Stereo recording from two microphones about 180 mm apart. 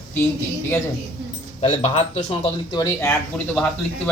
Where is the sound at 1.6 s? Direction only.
35° left (ahead or behind).